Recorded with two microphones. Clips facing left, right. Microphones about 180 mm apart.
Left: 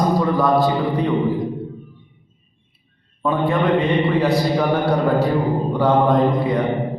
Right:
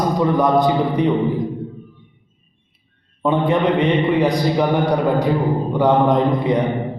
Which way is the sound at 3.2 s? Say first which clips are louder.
Right 2 dB; 20° right (ahead or behind).